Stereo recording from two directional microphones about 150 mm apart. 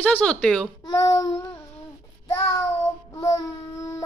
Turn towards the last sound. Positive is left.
turn(degrees=20)  # may be behind; listen again after turning